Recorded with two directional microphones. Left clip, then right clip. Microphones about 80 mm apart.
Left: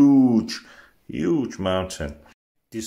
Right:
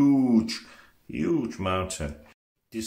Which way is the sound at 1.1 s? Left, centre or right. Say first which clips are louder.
Left 4 dB; left.